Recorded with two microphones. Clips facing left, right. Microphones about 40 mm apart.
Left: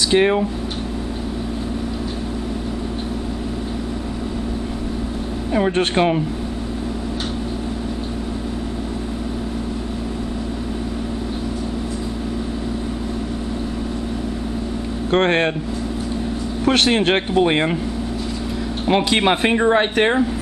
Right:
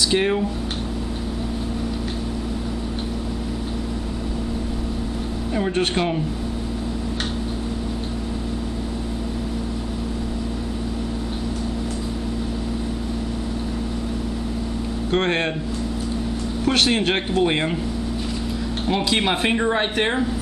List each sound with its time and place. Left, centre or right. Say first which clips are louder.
0.1 s speech: left 7 dB; centre
5.5 s speech: left 4 dB; left
15.0 s speech: left 5 dB; left
16.6 s speech: left 3 dB; left
18.9 s speech: left 5 dB; left